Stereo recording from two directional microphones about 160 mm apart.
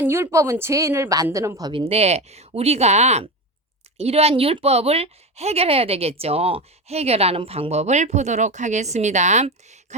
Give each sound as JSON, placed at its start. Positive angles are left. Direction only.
{"t": 0.0, "sound": "a woman's voice", "side_deg": -15}
{"t": 1.8, "sound": "speech", "side_deg": -40}